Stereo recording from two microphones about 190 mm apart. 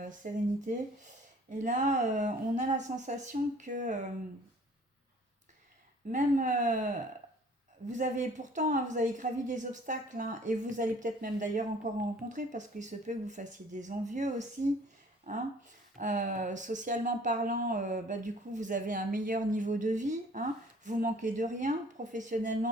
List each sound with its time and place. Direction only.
0.0 s a woman's voice: 45° right (ahead or behind)
6.1 s a woman's voice: 45° right (ahead or behind)
7.9 s a woman's voice: 40° right (ahead or behind)